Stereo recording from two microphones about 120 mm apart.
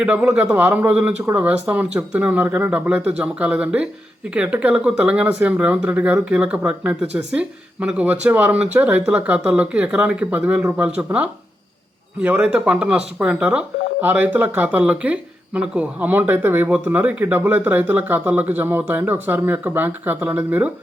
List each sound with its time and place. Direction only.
0.0 s speech: 10° right (ahead or behind)